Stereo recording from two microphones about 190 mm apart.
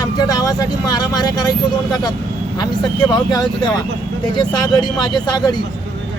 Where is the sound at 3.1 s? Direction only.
20° left (ahead or behind).